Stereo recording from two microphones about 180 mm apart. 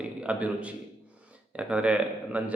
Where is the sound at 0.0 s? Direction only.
5° right (ahead or behind).